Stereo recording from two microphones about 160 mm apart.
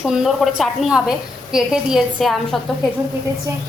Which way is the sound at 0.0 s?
5° right (ahead or behind).